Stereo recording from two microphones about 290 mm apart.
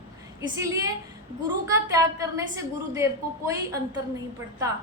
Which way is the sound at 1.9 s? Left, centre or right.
Centre.